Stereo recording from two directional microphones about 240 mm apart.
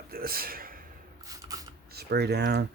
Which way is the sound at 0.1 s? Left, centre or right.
Right.